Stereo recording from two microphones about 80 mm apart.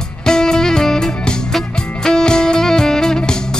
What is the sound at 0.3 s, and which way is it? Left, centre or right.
Music, centre.